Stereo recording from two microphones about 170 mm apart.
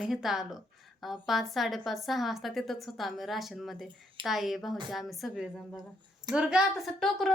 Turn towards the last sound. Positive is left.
turn(degrees=0)  # may be behind; listen again after turning